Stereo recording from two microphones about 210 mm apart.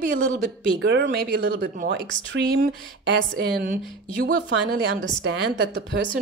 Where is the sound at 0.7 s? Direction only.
55° right (ahead or behind).